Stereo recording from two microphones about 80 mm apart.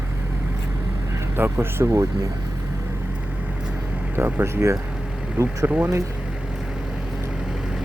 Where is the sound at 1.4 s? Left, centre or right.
Right.